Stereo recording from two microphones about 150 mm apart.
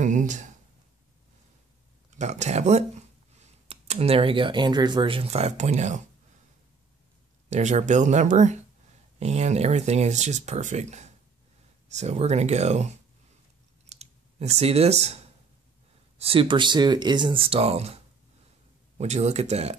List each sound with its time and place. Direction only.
0.0 s a sound: 55° right (ahead or behind)
2.1 s speech: 50° right (ahead or behind)
7.4 s speech: 50° right (ahead or behind)
13.8 s computer keyboard: 45° right (ahead or behind)
16.2 s speech: 40° right (ahead or behind)
18.9 s speech: 50° right (ahead or behind)